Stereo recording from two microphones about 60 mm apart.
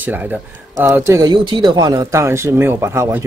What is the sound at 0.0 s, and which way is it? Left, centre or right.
Speech, right.